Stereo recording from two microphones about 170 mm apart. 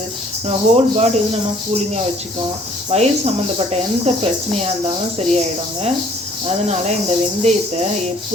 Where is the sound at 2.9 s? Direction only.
40° right (ahead or behind).